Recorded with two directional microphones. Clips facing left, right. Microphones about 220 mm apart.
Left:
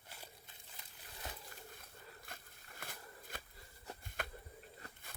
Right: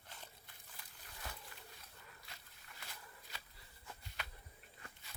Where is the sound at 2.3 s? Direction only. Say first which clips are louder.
Left 5 dB; 50° left (ahead or behind).